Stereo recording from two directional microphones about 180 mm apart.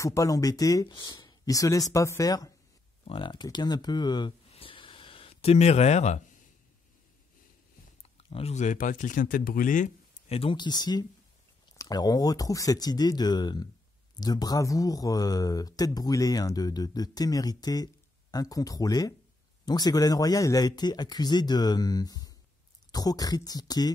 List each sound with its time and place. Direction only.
0.0 s a man's voice: 20° left (ahead or behind)
4.5 s a sound: 30° left (ahead or behind)
8.2 s a man's voice: 35° left (ahead or behind)